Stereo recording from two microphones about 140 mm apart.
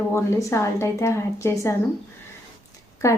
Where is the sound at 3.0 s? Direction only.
20° left (ahead or behind).